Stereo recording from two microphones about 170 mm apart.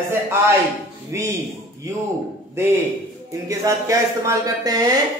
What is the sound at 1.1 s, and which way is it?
Speech, 15° right (ahead or behind).